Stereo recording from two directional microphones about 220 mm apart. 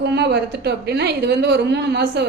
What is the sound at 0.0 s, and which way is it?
A woman's voice, 50° right (ahead or behind).